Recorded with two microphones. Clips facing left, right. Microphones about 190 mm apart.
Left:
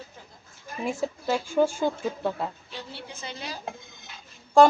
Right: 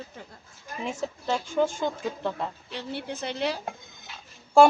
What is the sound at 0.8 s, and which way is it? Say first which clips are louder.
Speech: left 2 dB; 10° left (ahead or behind).